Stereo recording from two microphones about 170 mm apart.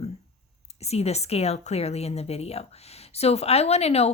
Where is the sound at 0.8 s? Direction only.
40° left (ahead or behind).